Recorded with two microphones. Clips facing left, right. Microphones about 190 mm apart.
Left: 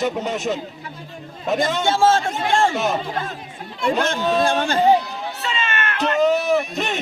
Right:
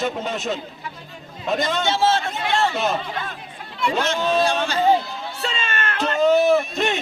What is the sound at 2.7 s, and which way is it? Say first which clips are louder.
Speech: left 1 dB; 15° left (ahead or behind).